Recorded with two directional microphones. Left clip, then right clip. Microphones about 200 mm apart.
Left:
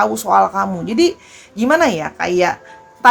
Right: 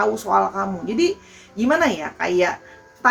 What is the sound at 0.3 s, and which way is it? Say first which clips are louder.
Speech: left 6 dB; 50° left (ahead or behind).